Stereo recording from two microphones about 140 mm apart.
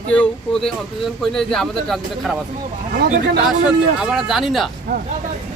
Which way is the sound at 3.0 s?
70° right (ahead or behind).